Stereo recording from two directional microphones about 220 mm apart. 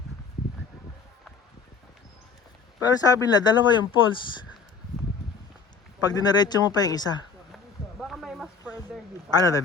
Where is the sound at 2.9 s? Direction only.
15° left (ahead or behind).